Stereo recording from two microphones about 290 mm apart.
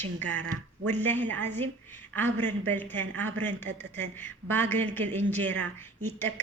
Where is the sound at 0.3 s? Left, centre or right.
Right.